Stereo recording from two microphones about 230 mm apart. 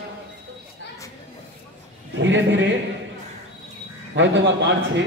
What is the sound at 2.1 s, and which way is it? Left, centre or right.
Speech, right.